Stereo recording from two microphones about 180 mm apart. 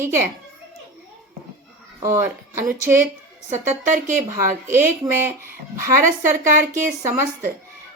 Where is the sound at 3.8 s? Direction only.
45° right (ahead or behind).